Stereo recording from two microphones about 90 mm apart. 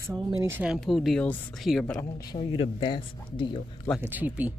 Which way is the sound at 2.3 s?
90° left.